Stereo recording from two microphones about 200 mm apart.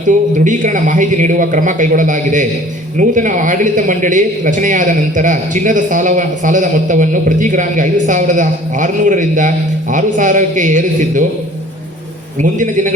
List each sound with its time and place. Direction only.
0.3 s a man's voice: 40° right (ahead or behind)
12.4 s a man's voice: 40° right (ahead or behind)